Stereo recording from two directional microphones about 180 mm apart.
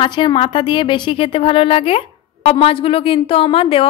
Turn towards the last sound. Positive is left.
turn(degrees=30)  # may be behind; listen again after turning